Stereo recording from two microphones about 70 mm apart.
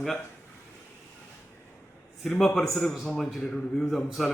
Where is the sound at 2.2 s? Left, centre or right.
Centre.